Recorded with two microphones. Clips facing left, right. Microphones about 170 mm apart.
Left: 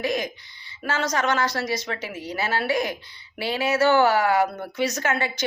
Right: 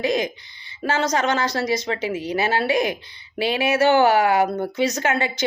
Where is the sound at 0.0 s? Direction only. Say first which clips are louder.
Right 4 dB; 25° right (ahead or behind).